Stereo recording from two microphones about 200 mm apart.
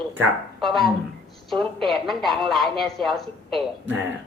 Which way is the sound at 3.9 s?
10° right (ahead or behind).